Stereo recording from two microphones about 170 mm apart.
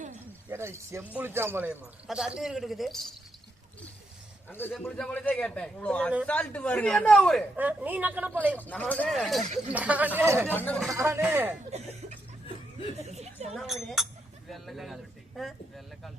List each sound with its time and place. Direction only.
0.5 s a man's voice: 15° right (ahead or behind)
4.4 s a man's voice: 10° left (ahead or behind)
7.5 s a man's voice: 10° right (ahead or behind)
8.5 s a man's voice: 10° left (ahead or behind); by 10.4 s 15° right (ahead or behind)
10.4 s speech: 10° left (ahead or behind)
10.9 s a man's voice: 15° right (ahead or behind)
11.7 s speech: 40° right (ahead or behind)
13.0 s a sound: 40° right (ahead or behind)
13.5 s speech: centre (ahead or behind)